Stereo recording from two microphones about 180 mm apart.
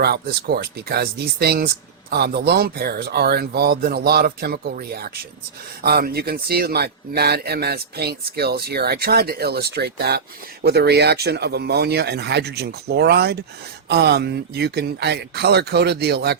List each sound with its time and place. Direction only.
0.0 s speech: 60° right (ahead or behind)